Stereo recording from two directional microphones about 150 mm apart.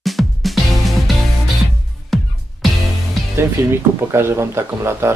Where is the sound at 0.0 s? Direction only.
Centre (ahead or behind).